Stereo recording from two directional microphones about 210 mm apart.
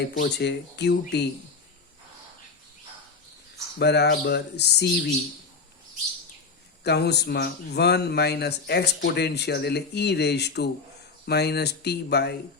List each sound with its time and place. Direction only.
0.2 s speech: 55° left (ahead or behind)
3.8 s speech: 50° left (ahead or behind)
6.8 s speech: 50° left (ahead or behind)